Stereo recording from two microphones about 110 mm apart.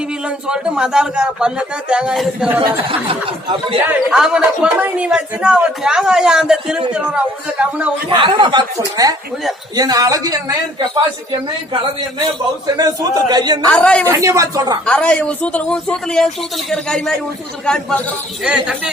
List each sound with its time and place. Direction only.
0.3 s speech: 10° right (ahead or behind)
3.1 s speech: 55° right (ahead or behind)
4.1 s speech: 5° right (ahead or behind)
8.1 s a man's voice: 45° right (ahead or behind)
12.2 s a man's voice: 35° right (ahead or behind)
13.7 s a man's voice: 10° left (ahead or behind)
14.0 s a man's voice: 30° right (ahead or behind)
14.8 s a man's voice: 10° left (ahead or behind)
18.4 s speech: 10° right (ahead or behind)